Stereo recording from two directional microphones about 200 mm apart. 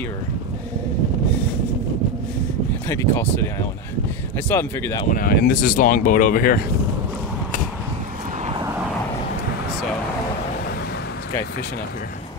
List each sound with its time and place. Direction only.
2.9 s speech: 15° left (ahead or behind)
5.1 s speech: 45° left (ahead or behind)